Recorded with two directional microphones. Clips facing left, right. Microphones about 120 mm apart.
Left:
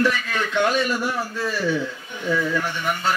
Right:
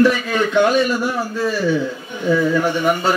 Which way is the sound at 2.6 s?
10° right (ahead or behind).